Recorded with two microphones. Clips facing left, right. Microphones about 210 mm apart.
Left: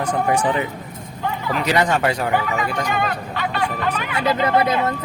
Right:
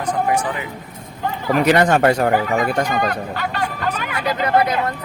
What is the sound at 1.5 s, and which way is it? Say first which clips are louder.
Speech: right 5 dB; 50° right (ahead or behind).